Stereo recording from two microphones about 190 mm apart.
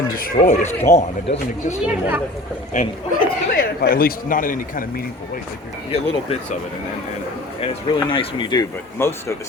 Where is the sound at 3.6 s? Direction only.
50° left (ahead or behind).